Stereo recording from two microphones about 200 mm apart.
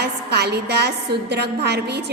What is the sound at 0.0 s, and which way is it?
A woman's voice, 55° right (ahead or behind).